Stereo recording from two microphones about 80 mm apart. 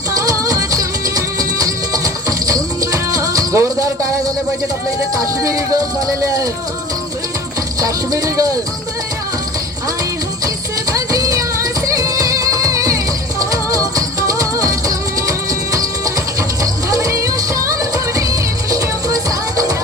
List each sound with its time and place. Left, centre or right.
0.2 s music: right
5.1 s speech: right
7.8 s speech: right
10.9 s music: right